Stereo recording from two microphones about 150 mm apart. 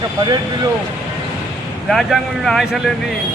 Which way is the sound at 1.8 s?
Centre (ahead or behind).